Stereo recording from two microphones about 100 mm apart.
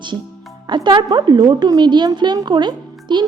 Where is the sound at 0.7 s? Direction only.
50° right (ahead or behind).